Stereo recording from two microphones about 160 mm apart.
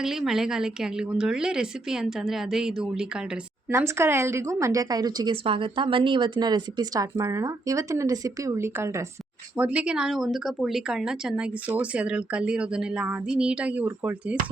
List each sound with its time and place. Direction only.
0.0 s a woman's voice: 5° right (ahead or behind)
3.7 s a woman's voice: 15° right (ahead or behind)